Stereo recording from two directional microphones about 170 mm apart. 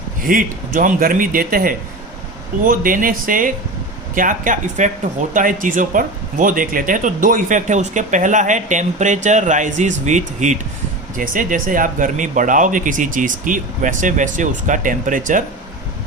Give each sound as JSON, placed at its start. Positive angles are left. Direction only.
{"t": 0.3, "sound": "a man's voice", "side_deg": -55}